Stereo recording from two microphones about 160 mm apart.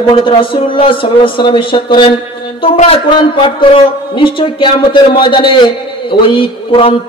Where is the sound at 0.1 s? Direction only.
35° left (ahead or behind).